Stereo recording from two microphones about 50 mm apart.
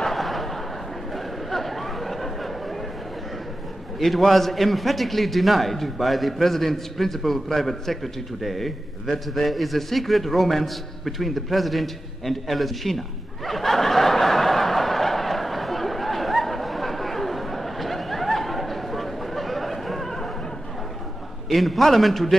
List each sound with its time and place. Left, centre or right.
0.0 s a sound: centre
1.1 s chatter: centre
4.0 s a man's voice: centre
13.5 s snicker: centre
21.5 s a man's voice: centre